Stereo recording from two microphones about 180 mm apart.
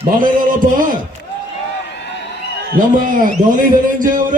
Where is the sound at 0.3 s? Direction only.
50° right (ahead or behind).